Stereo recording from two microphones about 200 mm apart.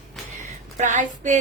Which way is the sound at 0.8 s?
40° right (ahead or behind).